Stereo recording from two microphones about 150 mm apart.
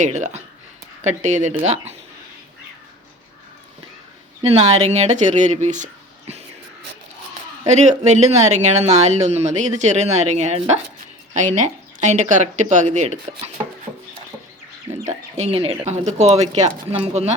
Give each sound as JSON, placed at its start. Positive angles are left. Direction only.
{"t": 0.0, "sound": "speech", "side_deg": -50}
{"t": 4.4, "sound": "speech", "side_deg": -45}
{"t": 7.7, "sound": "speech", "side_deg": -50}
{"t": 14.9, "sound": "speech", "side_deg": -45}